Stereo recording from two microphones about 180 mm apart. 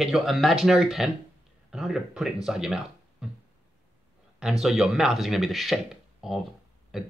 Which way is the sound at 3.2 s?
5° right (ahead or behind).